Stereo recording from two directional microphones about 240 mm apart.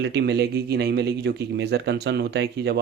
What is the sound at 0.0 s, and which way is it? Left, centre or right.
Speech, right.